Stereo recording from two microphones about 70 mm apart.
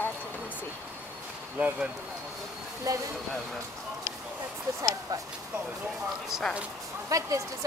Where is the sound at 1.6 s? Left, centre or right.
Centre.